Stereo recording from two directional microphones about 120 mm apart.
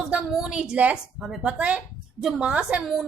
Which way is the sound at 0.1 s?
5° right (ahead or behind).